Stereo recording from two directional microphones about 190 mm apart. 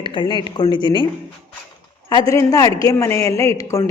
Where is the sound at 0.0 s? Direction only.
25° left (ahead or behind).